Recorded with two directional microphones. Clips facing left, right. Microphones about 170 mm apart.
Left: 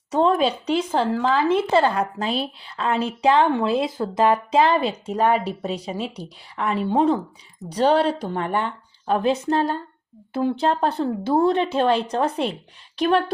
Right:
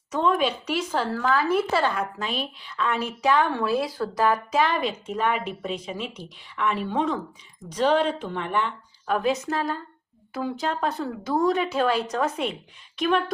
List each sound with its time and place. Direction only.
0.1 s speech: 30° left (ahead or behind)